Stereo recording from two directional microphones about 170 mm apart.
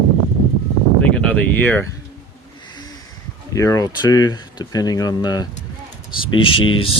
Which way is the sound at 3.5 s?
20° left (ahead or behind).